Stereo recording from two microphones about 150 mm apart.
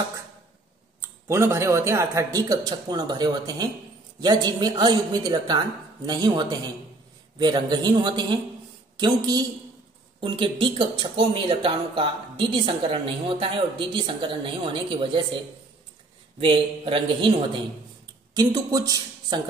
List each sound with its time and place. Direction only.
1.2 s a man's voice: 20° right (ahead or behind); by 15.2 s 35° right (ahead or behind)
16.3 s speech: 35° right (ahead or behind)
18.3 s a woman's voice: 25° right (ahead or behind)